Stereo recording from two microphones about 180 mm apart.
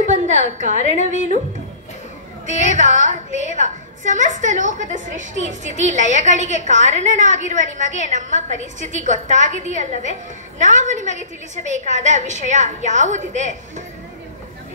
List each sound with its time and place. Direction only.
0.0 s a sound: 40° right (ahead or behind)
0.7 s a woman's voice: 40° left (ahead or behind)
2.7 s a woman's voice: 45° right (ahead or behind)